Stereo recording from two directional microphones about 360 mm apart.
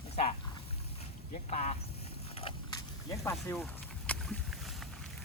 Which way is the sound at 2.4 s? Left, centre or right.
Centre.